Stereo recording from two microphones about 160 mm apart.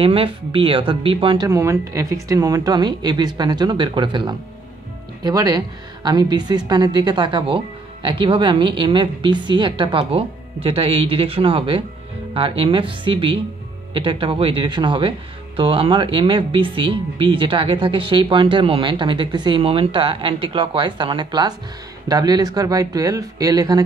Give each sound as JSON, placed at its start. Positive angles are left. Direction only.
{"t": 0.0, "sound": "speech", "side_deg": -35}